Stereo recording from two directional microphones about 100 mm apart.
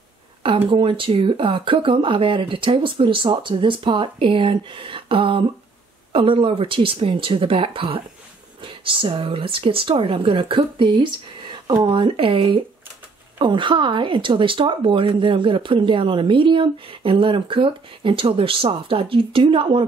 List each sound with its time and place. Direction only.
0.7 s speech: 60° right (ahead or behind)
13.4 s speech: 55° right (ahead or behind)